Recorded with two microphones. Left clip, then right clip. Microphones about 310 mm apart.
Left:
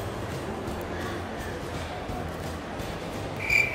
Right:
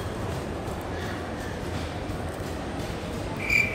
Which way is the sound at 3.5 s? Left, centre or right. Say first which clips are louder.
Even; centre.